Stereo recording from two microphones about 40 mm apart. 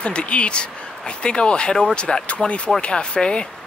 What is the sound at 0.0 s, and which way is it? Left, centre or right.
Speech, left.